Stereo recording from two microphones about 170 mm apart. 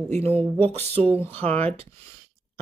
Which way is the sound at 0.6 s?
35° right (ahead or behind).